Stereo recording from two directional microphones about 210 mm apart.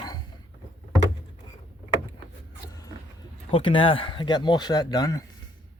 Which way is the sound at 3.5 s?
25° left (ahead or behind).